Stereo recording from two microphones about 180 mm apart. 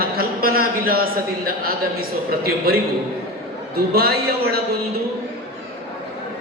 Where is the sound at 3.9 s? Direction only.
60° right (ahead or behind).